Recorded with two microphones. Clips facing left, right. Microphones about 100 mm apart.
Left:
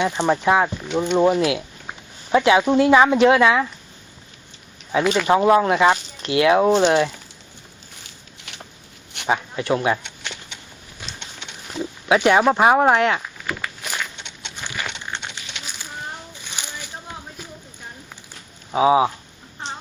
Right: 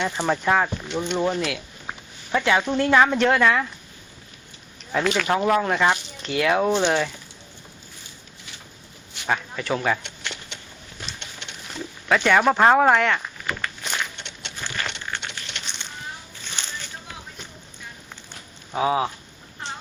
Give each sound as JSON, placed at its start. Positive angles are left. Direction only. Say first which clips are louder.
{"t": 0.0, "sound": "speech", "louder": "left 4 dB", "side_deg": 15}
{"t": 4.9, "sound": "speech", "louder": "left 3 dB", "side_deg": 5}
{"t": 5.3, "sound": "speech", "louder": "left 6 dB", "side_deg": 20}
{"t": 8.4, "sound": "a sound", "louder": "left 6 dB", "side_deg": 70}
{"t": 9.2, "sound": "speech", "louder": "left 4 dB", "side_deg": 10}
{"t": 11.7, "sound": "oink", "louder": "left 4 dB", "side_deg": 15}
{"t": 12.5, "sound": "speech", "louder": "left 1 dB", "side_deg": 10}
{"t": 13.2, "sound": "walk", "louder": "left 1 dB", "side_deg": 5}
{"t": 14.3, "sound": "a sound", "louder": "even", "side_deg": 15}
{"t": 16.4, "sound": "a sound", "louder": "left 1 dB", "side_deg": 15}
{"t": 18.7, "sound": "speech", "louder": "left 6 dB", "side_deg": 15}